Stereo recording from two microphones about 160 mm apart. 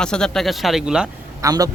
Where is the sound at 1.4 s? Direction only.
20° right (ahead or behind).